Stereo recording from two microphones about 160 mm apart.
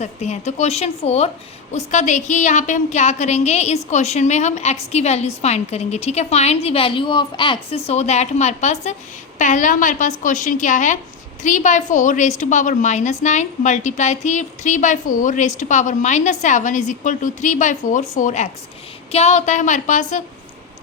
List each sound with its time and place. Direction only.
0.0 s a woman's voice: 45° left (ahead or behind)